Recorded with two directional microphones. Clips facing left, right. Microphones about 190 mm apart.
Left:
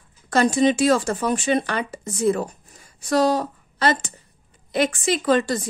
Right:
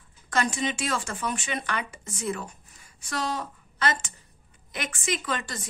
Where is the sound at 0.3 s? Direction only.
35° left (ahead or behind).